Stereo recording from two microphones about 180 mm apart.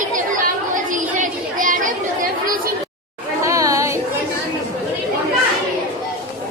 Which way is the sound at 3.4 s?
15° right (ahead or behind).